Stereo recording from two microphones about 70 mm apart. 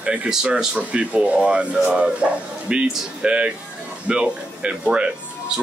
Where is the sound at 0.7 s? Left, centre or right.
Centre.